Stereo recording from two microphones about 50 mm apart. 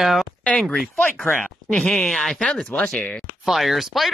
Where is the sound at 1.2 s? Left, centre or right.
Centre.